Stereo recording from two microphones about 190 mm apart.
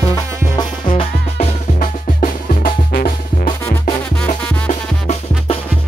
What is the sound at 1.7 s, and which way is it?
Music, 45° left (ahead or behind).